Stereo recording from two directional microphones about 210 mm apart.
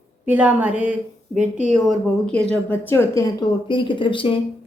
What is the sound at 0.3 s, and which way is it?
A woman's voice, 5° right (ahead or behind).